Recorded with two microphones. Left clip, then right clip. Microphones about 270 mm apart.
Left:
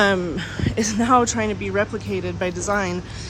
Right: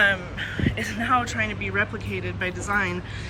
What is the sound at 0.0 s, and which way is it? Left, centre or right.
A woman's voice, centre.